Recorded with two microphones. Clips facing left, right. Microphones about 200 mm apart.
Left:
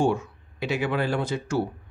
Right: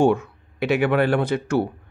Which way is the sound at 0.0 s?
60° right (ahead or behind).